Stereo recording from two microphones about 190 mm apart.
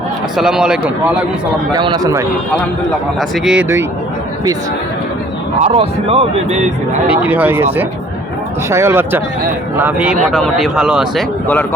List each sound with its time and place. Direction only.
0.3 s speech: 5° right (ahead or behind)
1.7 s a man's voice: 20° right (ahead or behind)
3.2 s speech: centre (ahead or behind)
5.5 s a man's voice: 35° right (ahead or behind)
7.1 s speech: 10° right (ahead or behind)